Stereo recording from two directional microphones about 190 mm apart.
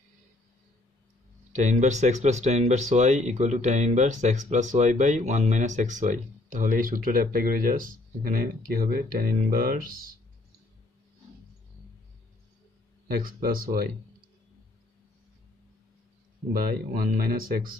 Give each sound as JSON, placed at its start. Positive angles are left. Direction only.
{"t": 1.5, "sound": "speech", "side_deg": -40}
{"t": 13.1, "sound": "speech", "side_deg": -50}
{"t": 16.6, "sound": "speech", "side_deg": -50}